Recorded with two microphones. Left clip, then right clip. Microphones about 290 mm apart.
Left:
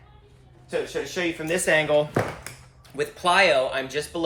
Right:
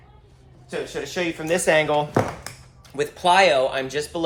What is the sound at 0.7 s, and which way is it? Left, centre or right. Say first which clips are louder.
Speech: left 1 dB; centre.